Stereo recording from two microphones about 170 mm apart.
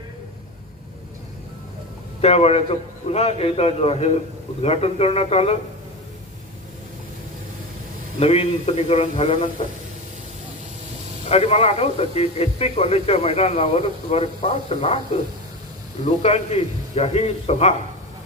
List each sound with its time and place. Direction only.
2.2 s speech: 35° left (ahead or behind)
8.2 s speech: 40° left (ahead or behind)
11.3 s speech: 35° left (ahead or behind)
16.0 s speech: 40° left (ahead or behind)